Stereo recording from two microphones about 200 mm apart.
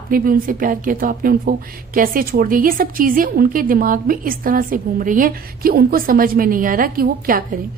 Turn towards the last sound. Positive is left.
turn(degrees=-45)  # may be behind; listen again after turning